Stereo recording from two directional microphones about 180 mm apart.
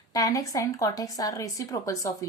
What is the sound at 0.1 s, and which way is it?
Speech, 20° left (ahead or behind).